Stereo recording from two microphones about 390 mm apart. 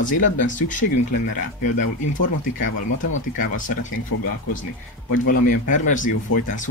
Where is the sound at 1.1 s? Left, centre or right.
Left.